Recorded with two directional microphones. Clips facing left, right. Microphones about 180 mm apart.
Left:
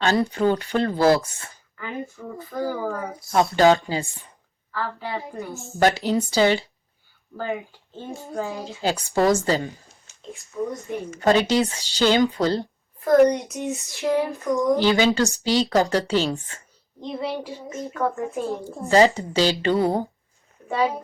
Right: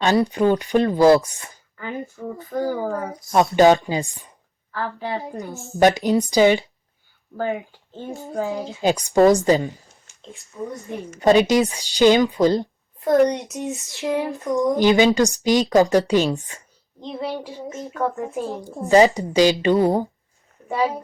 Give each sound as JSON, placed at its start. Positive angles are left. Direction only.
{"t": 0.0, "sound": "speech", "side_deg": -15}
{"t": 7.9, "sound": "speech", "side_deg": -20}
{"t": 10.3, "sound": "speech", "side_deg": 0}
{"t": 11.2, "sound": "speech", "side_deg": -15}